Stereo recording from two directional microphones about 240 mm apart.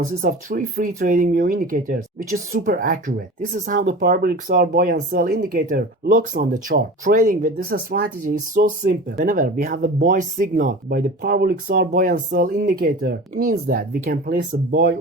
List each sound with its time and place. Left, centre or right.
0.0 s speech: right